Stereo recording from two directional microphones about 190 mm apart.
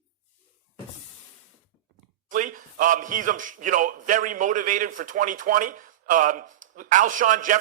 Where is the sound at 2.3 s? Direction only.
45° right (ahead or behind).